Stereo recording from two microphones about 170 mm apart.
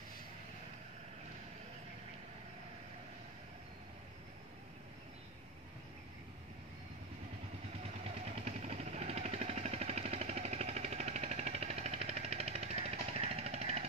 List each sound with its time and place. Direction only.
8.5 s vehicle: 40° right (ahead or behind)